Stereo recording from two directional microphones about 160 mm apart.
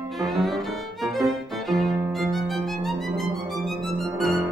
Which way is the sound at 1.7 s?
Centre (ahead or behind).